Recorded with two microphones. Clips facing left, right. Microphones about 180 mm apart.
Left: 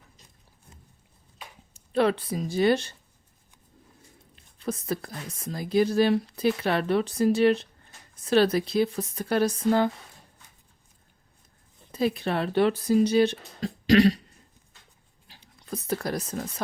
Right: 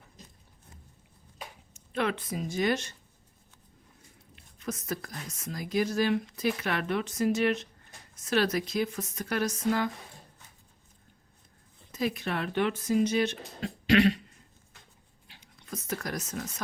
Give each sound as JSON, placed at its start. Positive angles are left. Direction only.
{"t": 1.7, "sound": "speech", "side_deg": 35}
{"t": 4.4, "sound": "speech", "side_deg": 30}
{"t": 11.9, "sound": "speech", "side_deg": 30}
{"t": 15.3, "sound": "a sound", "side_deg": 35}